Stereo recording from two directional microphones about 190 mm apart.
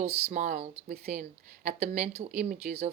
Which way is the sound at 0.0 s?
40° right (ahead or behind).